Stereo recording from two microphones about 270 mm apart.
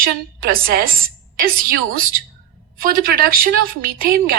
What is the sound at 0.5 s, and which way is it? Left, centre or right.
A woman's voice, right.